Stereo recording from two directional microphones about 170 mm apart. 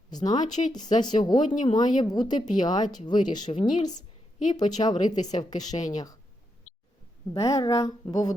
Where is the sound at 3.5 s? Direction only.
45° left (ahead or behind).